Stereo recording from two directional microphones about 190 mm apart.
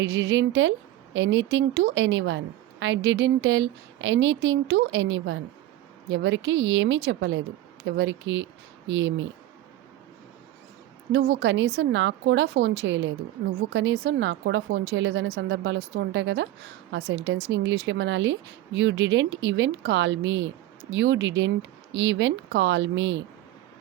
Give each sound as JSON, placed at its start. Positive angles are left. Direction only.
{"t": 0.0, "sound": "a woman's voice", "side_deg": -80}
{"t": 11.1, "sound": "speech", "side_deg": -70}